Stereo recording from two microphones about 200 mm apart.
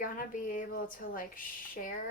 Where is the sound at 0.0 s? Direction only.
40° left (ahead or behind).